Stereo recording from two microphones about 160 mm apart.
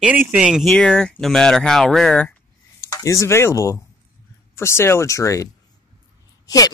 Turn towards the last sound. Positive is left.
turn(degrees=25)  # may be behind; listen again after turning